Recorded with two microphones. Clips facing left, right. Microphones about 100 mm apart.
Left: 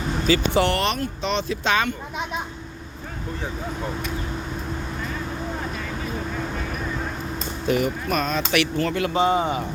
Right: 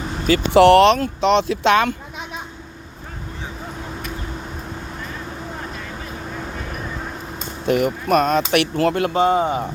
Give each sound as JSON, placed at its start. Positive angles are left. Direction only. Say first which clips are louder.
{"t": 0.3, "sound": "speech", "louder": "right 9 dB", "side_deg": -60}
{"t": 7.7, "sound": "speech", "louder": "right 5 dB", "side_deg": -55}